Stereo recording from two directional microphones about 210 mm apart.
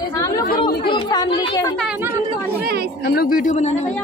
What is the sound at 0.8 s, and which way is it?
Speech, 20° left (ahead or behind).